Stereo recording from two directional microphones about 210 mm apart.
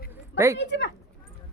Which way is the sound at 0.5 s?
55° left (ahead or behind).